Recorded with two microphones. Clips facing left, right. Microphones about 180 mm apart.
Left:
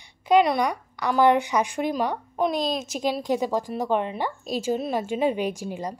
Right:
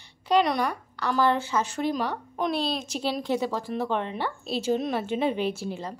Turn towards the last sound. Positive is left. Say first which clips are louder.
# left 1 dB
turn(degrees=10)  # may be behind; listen again after turning